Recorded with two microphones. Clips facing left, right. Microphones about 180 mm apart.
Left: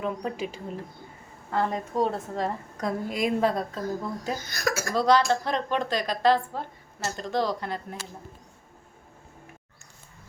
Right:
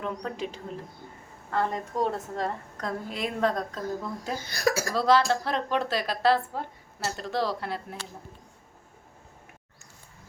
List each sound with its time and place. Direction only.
0.0 s a woman's voice: 10° left (ahead or behind)
4.4 s speech: 30° right (ahead or behind)
4.9 s a woman's voice: 5° right (ahead or behind)